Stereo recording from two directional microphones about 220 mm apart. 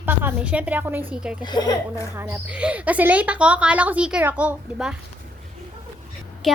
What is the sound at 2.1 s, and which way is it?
A woman's voice, 10° right (ahead or behind).